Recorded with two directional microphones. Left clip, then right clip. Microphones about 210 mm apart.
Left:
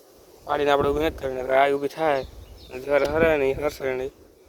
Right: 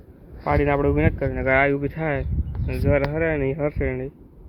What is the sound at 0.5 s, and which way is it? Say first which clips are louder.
Speech: even; 15° left (ahead or behind).